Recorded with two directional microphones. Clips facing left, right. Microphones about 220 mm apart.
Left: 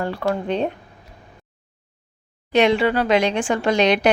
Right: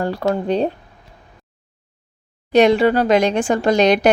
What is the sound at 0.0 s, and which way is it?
Speech, 40° right (ahead or behind).